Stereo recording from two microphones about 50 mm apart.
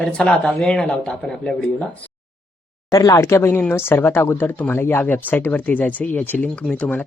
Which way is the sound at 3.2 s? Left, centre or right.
Left.